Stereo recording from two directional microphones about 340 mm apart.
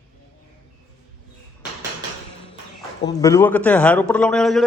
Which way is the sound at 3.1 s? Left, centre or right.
Centre.